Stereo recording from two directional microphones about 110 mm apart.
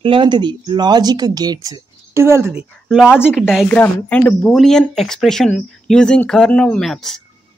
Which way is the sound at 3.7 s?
10° left (ahead or behind).